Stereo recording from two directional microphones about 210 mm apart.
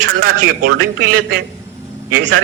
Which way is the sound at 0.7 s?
45° right (ahead or behind).